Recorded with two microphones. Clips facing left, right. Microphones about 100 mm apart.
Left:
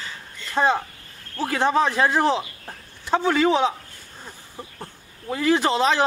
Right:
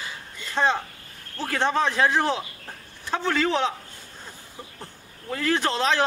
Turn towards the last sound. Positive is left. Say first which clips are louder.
# left 3 dB
turn(degrees=10)  # may be behind; listen again after turning